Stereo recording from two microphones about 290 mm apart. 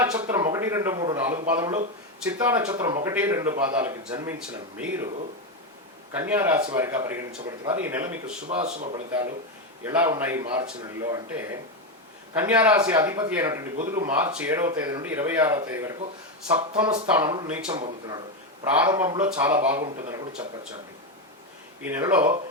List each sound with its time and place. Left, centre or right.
0.0 s speech: centre
6.1 s speech: centre
8.4 s speech: right
9.8 s speech: centre
17.7 s speech: right
18.8 s speech: centre
21.8 s speech: centre